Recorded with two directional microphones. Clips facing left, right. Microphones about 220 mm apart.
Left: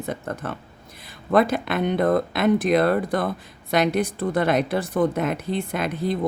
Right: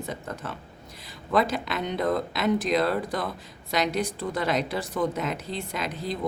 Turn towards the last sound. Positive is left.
turn(degrees=55)  # may be behind; listen again after turning